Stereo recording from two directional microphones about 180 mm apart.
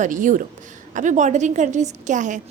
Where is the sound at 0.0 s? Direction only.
45° right (ahead or behind).